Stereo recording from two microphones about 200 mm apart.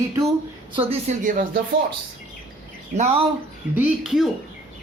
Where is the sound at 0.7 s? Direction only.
35° right (ahead or behind).